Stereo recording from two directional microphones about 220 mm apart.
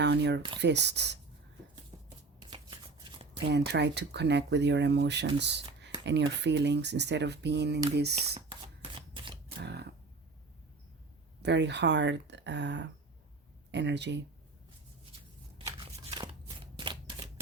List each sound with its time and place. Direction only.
0.0 s speech: 50° right (ahead or behind)
2.4 s shuffling cards: 20° right (ahead or behind)
3.4 s speech: 50° right (ahead or behind)
9.0 s camera: 25° right (ahead or behind)
9.6 s music: 50° right (ahead or behind)
11.4 s speech: 50° right (ahead or behind)
15.5 s shuffling cards: 20° right (ahead or behind)